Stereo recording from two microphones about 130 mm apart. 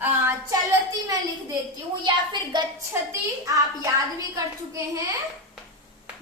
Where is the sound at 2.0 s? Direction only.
35° right (ahead or behind).